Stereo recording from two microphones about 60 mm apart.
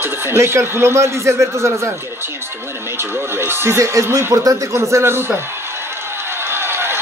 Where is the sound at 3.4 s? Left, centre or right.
Right.